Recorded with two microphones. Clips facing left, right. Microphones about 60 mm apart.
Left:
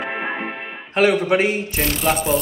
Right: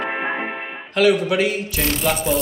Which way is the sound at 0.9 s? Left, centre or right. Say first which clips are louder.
Even; left.